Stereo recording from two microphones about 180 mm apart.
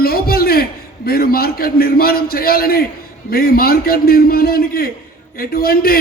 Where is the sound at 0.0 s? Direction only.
55° left (ahead or behind).